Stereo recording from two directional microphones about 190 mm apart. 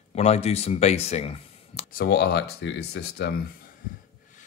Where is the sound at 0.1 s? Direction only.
35° left (ahead or behind).